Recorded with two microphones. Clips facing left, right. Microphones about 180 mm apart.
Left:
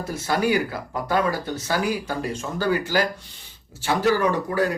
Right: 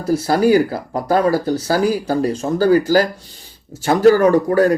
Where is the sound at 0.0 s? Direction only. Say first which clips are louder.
Right 8 dB; 35° right (ahead or behind).